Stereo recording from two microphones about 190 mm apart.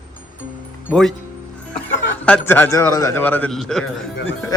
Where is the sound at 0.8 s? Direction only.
5° left (ahead or behind).